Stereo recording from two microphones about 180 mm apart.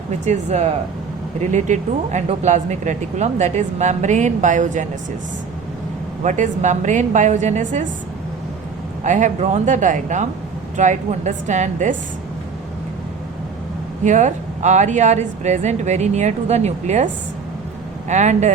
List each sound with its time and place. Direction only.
0.3 s speech: 40° right (ahead or behind)
6.2 s a woman's voice: 45° right (ahead or behind)
9.0 s a woman's voice: 45° right (ahead or behind)
14.0 s speech: 40° right (ahead or behind)
18.1 s speech: 40° right (ahead or behind)